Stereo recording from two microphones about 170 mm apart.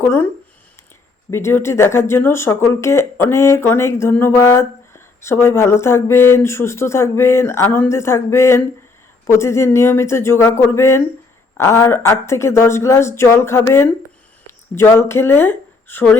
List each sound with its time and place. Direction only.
0.0 s speech: 15° left (ahead or behind)
1.3 s speech: 15° left (ahead or behind)